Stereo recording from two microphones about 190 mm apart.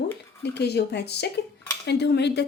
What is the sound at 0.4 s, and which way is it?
A woman's voice, 60° left (ahead or behind).